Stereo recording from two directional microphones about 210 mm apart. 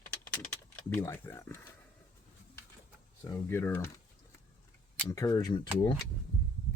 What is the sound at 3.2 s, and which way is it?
Speech, 10° left (ahead or behind).